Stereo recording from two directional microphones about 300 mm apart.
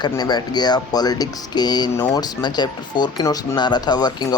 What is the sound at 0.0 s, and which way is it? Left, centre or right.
Speech, centre.